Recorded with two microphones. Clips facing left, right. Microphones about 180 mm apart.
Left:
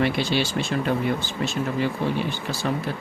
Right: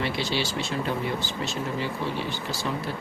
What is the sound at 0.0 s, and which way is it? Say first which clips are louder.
Speech: left 5 dB; 55° left (ahead or behind).